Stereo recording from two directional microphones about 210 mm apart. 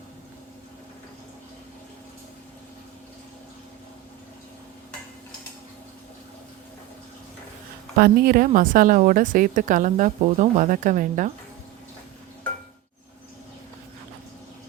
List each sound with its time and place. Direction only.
7.9 s a woman's voice: 45° right (ahead or behind)